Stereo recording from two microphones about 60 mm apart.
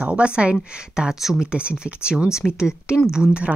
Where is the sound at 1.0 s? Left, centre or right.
Centre.